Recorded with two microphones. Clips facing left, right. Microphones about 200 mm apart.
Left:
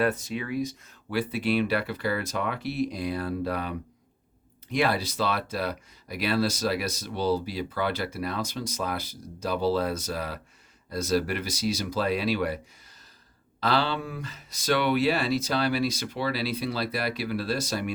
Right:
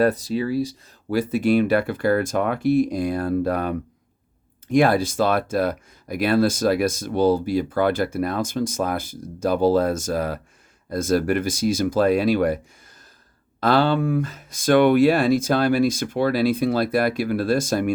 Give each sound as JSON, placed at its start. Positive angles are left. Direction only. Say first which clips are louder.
{"t": 0.0, "sound": "speech", "louder": "right 7 dB", "side_deg": -35}
{"t": 13.6, "sound": "speech", "louder": "right 8 dB", "side_deg": -50}